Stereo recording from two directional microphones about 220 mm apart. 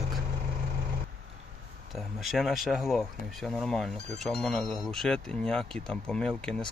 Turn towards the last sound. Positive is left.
turn(degrees=5)  # may be behind; listen again after turning